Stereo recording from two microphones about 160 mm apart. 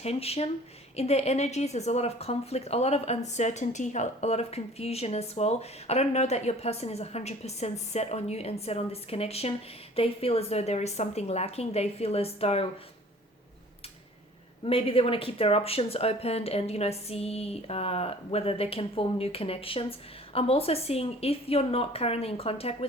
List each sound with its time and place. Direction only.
0.0 s a woman's voice: 40° left (ahead or behind)
14.6 s a woman's voice: 35° left (ahead or behind)